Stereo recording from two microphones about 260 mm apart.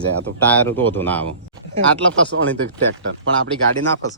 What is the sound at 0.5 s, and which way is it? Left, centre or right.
Speech, centre.